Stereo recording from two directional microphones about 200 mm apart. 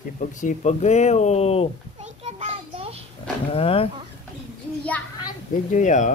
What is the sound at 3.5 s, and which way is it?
Speech, 30° left (ahead or behind).